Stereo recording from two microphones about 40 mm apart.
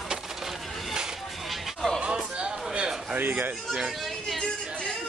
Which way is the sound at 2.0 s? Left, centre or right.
Right.